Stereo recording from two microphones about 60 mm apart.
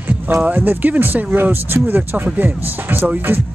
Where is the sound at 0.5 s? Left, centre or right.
Right.